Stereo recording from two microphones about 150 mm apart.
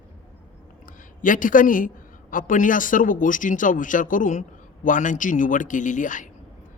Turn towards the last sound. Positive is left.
turn(degrees=60)  # may be behind; listen again after turning